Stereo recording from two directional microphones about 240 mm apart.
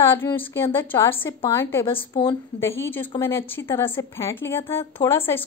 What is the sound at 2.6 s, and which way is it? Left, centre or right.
A woman's voice, centre.